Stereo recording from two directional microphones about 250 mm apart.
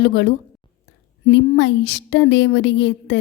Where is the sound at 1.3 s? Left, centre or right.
Left.